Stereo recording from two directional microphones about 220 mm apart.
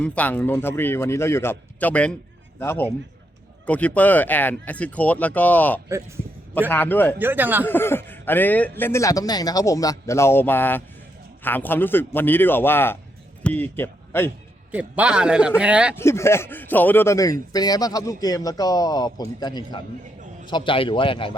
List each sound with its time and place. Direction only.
0.0 s speech: 5° left (ahead or behind)
7.2 s speech: 10° right (ahead or behind)
7.7 s speech: 10° left (ahead or behind)
14.7 s a man's voice: 5° right (ahead or behind)
16.0 s speech: 10° left (ahead or behind)